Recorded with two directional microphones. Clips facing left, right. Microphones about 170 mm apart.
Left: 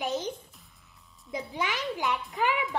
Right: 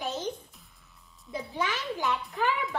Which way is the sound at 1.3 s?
15° left (ahead or behind).